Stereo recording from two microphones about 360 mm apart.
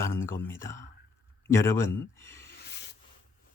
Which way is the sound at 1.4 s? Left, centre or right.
Centre.